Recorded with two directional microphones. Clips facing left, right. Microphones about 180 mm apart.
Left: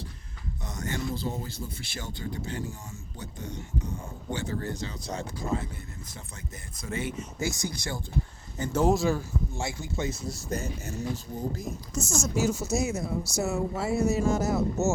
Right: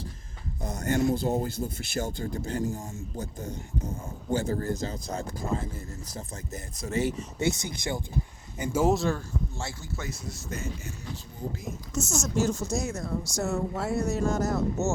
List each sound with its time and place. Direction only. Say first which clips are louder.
0.8 s speech: right 7 dB; 50° right (ahead or behind)
4.3 s speech: right 5 dB; 45° right (ahead or behind)
6.1 s speech: right 5 dB; 40° right (ahead or behind)
7.3 s speech: right 3 dB; 25° right (ahead or behind); by 10.2 s 20° left (ahead or behind)
10.2 s speech: left 3 dB; 35° left (ahead or behind)
11.9 s speech: right 1 dB; centre (ahead or behind)